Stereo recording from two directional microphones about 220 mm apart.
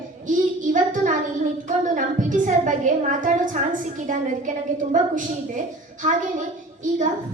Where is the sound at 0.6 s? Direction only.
35° right (ahead or behind).